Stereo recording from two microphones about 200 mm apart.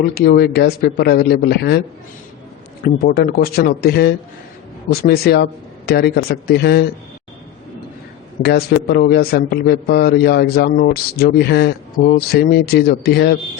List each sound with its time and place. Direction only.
0.1 s a man's voice: 50° left (ahead or behind)
2.8 s a man's voice: 50° left (ahead or behind)
8.4 s a man's voice: 55° left (ahead or behind)